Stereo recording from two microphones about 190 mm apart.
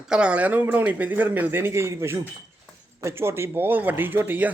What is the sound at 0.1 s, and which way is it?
Speech, 5° right (ahead or behind).